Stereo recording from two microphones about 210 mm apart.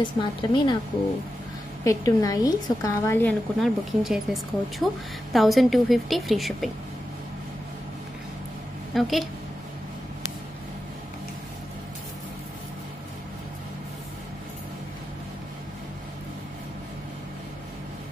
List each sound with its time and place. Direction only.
0.0 s a woman's voice: 20° left (ahead or behind)
1.9 s a woman's voice: 15° left (ahead or behind)
3.5 s a woman's voice: centre (ahead or behind)
8.9 s a woman's voice: centre (ahead or behind)